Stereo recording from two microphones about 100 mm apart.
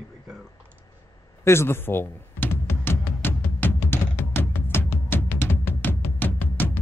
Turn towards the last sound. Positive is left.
turn(degrees=20)  # may be behind; listen again after turning